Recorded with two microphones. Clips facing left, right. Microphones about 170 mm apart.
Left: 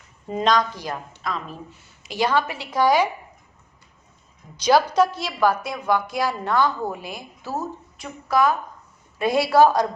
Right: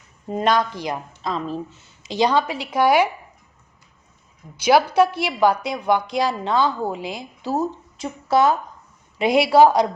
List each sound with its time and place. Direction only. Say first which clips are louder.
0.3 s a woman's voice: right 1 dB; 5° right (ahead or behind)
1.2 s a woman's voice: right 5 dB; 30° right (ahead or behind); by 3.1 s 10° right (ahead or behind)
4.6 s a woman's voice: right 2 dB; 10° right (ahead or behind)
9.1 s a woman's voice: right 3 dB; 15° right (ahead or behind)